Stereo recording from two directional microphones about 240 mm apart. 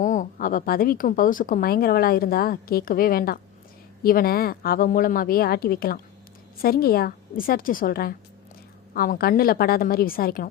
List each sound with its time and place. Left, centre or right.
0.0 s a woman's voice: left